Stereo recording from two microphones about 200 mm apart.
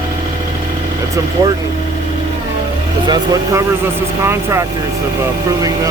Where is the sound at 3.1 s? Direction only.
20° right (ahead or behind).